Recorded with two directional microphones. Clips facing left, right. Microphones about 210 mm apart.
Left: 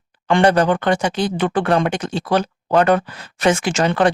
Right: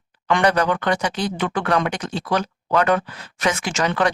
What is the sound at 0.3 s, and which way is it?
Speech, 30° left (ahead or behind).